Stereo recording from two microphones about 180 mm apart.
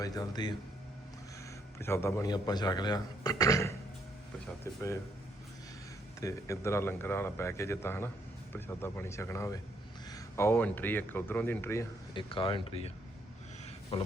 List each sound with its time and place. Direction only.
0.0 s speech: 20° left (ahead or behind)
1.8 s speech: 15° left (ahead or behind)
6.1 s speech: 15° left (ahead or behind)
12.1 s speech: 30° left (ahead or behind)